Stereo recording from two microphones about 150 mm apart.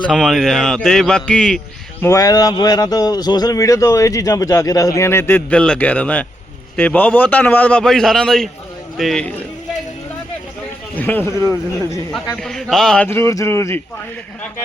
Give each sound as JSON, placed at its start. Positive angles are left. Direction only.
{"t": 0.1, "sound": "a man's voice", "side_deg": 0}
{"t": 2.0, "sound": "a man's voice", "side_deg": 20}
{"t": 10.9, "sound": "a man's voice", "side_deg": 10}
{"t": 12.4, "sound": "a man's voice", "side_deg": 5}
{"t": 13.1, "sound": "a man's voice", "side_deg": 15}